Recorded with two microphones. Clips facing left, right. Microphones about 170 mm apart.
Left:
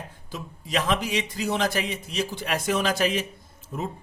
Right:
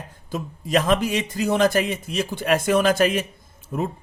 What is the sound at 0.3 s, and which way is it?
A man's voice, 50° right (ahead or behind).